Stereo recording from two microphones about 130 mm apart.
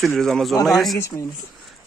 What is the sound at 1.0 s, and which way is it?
Speech, 20° left (ahead or behind).